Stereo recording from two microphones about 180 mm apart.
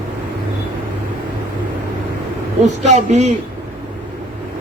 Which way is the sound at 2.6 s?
40° right (ahead or behind).